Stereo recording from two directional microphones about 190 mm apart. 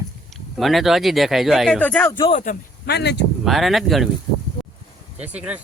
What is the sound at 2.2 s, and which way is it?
Speech, 25° left (ahead or behind).